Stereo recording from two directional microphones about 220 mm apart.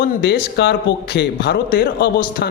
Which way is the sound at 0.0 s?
50° left (ahead or behind).